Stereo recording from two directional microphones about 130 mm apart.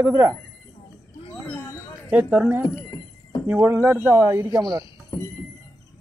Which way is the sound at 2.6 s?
30° left (ahead or behind).